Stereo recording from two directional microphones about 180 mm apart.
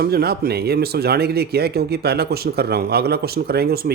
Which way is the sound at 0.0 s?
60° right (ahead or behind).